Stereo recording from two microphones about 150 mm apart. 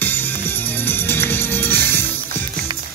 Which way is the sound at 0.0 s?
15° left (ahead or behind).